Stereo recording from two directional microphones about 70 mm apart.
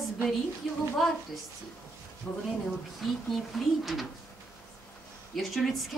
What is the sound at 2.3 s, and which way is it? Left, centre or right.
Speech, left.